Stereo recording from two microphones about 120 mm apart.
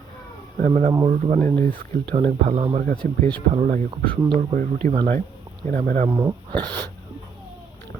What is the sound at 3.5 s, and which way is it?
Speech, 90° right.